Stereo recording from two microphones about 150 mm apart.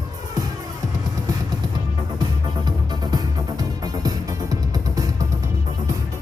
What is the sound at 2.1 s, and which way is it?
Music, 30° right (ahead or behind).